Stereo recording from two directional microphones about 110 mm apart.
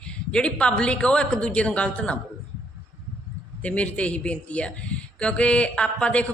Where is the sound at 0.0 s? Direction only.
10° left (ahead or behind).